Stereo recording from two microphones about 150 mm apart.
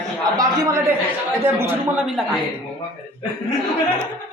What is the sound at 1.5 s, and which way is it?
Speech, 10° right (ahead or behind).